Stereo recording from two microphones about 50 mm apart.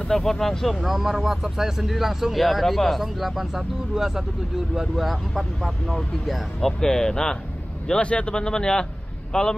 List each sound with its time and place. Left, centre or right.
0.1 s speech: centre
0.7 s speech: centre
7.9 s a man's voice: left